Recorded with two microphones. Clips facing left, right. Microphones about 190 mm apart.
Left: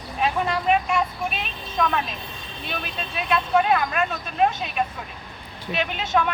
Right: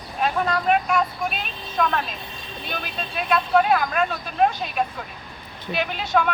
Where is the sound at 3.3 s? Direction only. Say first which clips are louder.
Right 1 dB; centre (ahead or behind).